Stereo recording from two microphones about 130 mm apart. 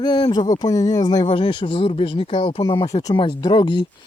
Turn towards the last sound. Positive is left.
turn(degrees=35)  # may be behind; listen again after turning